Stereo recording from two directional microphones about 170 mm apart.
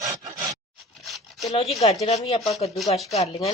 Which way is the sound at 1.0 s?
Centre (ahead or behind).